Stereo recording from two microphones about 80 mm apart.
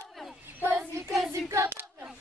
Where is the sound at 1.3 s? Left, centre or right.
Right.